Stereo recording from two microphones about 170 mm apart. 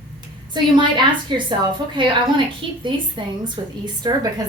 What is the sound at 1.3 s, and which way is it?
A woman's voice, 30° right (ahead or behind).